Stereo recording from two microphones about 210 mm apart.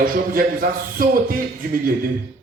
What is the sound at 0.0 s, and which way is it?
A man's voice, 40° right (ahead or behind).